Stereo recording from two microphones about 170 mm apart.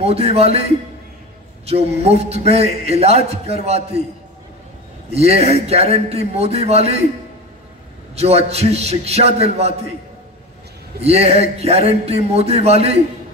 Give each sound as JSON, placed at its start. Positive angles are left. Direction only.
{"t": 0.0, "sound": "a man's voice", "side_deg": -35}
{"t": 1.7, "sound": "a man's voice", "side_deg": -40}
{"t": 5.1, "sound": "a man's voice", "side_deg": -40}
{"t": 8.2, "sound": "a man's voice", "side_deg": -40}
{"t": 11.1, "sound": "a man's voice", "side_deg": -40}